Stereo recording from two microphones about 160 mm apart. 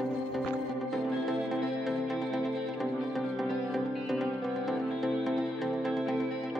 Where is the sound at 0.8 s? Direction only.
Centre (ahead or behind).